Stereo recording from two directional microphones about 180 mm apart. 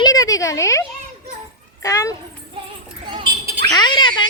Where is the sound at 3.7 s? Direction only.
25° left (ahead or behind).